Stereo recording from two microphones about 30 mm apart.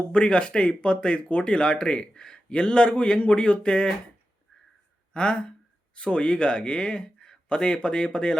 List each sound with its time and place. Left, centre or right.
0.1 s a man's voice: left
1.5 s a man's voice: left
5.1 s a sound: left
6.0 s a man's voice: left